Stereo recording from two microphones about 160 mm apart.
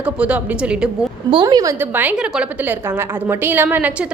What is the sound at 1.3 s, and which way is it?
A woman's voice, 25° right (ahead or behind).